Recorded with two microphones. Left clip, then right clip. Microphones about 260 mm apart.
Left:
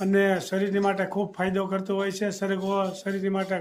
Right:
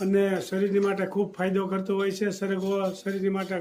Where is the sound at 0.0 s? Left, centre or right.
Centre.